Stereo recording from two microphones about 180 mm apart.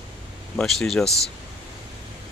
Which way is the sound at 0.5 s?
5° left (ahead or behind).